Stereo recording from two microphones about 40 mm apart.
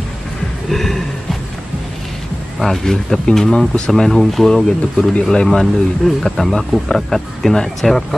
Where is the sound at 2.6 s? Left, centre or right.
Centre.